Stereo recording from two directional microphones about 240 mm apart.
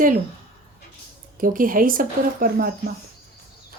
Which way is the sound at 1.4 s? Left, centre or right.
Right.